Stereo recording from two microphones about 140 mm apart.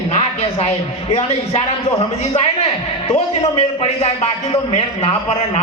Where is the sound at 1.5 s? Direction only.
45° left (ahead or behind).